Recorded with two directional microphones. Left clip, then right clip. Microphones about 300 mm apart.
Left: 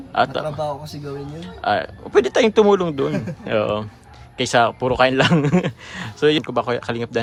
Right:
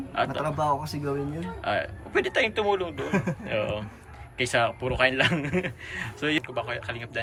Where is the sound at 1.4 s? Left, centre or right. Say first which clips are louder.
Left 13 dB; centre.